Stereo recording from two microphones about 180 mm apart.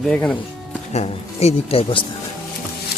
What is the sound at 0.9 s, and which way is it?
Speech, 35° left (ahead or behind).